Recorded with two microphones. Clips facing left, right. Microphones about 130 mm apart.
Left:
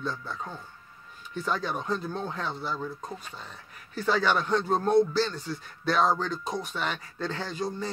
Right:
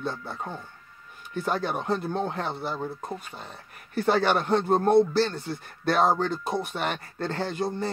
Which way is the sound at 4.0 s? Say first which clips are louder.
Right 3 dB; 55° right (ahead or behind).